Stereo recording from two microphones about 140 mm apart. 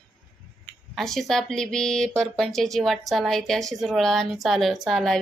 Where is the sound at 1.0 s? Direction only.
Centre (ahead or behind).